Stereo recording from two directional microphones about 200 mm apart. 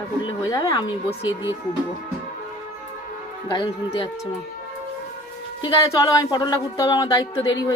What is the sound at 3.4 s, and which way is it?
Speech, 20° left (ahead or behind).